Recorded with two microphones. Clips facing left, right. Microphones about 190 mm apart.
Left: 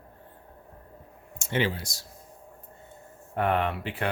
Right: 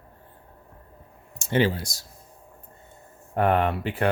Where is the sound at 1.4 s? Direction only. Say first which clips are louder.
Right 5 dB; 35° right (ahead or behind).